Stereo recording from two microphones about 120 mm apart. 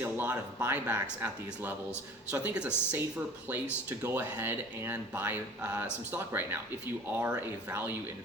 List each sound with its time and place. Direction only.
0.0 s speech: 15° right (ahead or behind)
4.0 s speech: 15° right (ahead or behind)